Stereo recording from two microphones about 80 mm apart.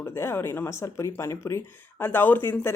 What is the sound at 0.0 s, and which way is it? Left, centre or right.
Speech, left.